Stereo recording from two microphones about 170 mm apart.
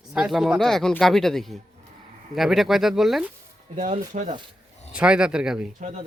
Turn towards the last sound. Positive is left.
turn(degrees=-40)  # may be behind; listen again after turning